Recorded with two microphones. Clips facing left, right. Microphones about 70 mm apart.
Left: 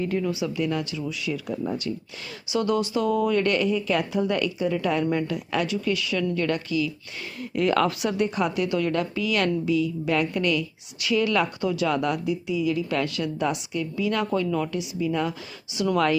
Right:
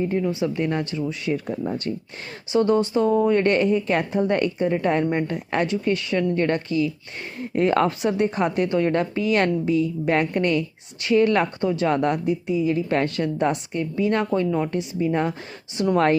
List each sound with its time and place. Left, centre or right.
0.0 s a woman's voice: right
0.4 s a woman's voice: right
14.8 s a woman's voice: right